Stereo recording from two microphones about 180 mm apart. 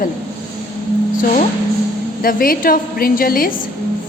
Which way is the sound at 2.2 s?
55° left (ahead or behind).